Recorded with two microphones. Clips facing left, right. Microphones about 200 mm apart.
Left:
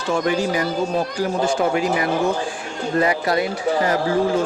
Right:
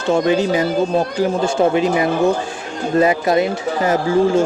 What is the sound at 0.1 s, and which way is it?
A man's voice, 25° right (ahead or behind).